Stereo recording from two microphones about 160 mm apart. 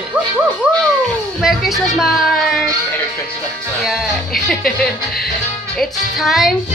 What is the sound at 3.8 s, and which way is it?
Speech, centre (ahead or behind).